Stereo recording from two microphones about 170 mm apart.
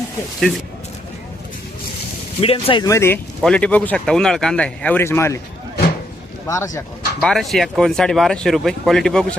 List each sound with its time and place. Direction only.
0.3 s speech: centre (ahead or behind)
2.4 s speech: 35° left (ahead or behind)
2.8 s speech: 15° left (ahead or behind)
3.4 s speech: 5° left (ahead or behind)
6.5 s speech: 15° left (ahead or behind)
7.3 s speech: centre (ahead or behind)